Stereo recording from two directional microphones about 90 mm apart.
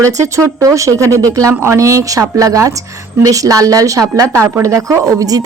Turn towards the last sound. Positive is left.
turn(degrees=-40)  # may be behind; listen again after turning